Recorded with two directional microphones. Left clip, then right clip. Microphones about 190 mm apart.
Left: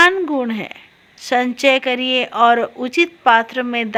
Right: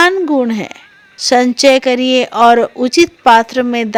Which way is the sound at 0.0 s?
40° right (ahead or behind).